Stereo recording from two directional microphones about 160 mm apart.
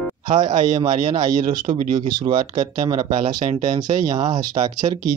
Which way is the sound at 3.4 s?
50° right (ahead or behind).